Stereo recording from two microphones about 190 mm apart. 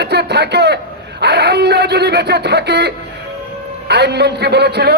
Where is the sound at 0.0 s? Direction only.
60° right (ahead or behind).